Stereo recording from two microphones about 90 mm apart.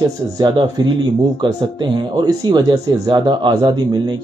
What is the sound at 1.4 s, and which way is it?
Speech, 60° right (ahead or behind).